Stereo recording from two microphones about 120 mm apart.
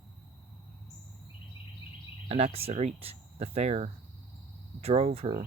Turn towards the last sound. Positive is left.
turn(degrees=-55)  # may be behind; listen again after turning